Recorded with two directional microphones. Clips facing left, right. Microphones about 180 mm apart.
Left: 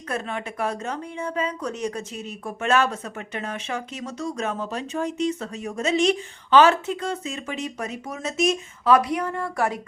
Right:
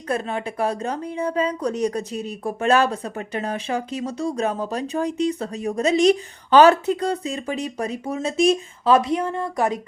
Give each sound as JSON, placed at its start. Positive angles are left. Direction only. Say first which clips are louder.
{"t": 0.1, "sound": "speech", "louder": "right 4 dB", "side_deg": -35}